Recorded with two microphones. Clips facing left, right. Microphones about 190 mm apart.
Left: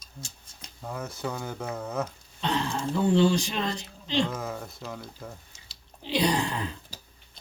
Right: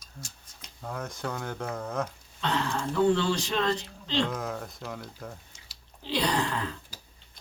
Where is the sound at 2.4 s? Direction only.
20° left (ahead or behind).